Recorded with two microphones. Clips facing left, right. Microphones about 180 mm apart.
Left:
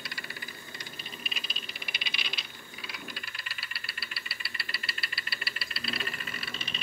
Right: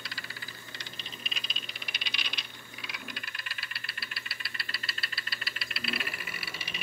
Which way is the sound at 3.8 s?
5° left (ahead or behind).